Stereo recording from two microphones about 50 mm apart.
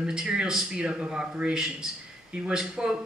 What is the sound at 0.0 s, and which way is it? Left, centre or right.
A man's voice, centre.